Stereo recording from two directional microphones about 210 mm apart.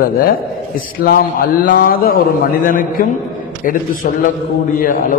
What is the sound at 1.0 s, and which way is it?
A man's voice, 45° left (ahead or behind).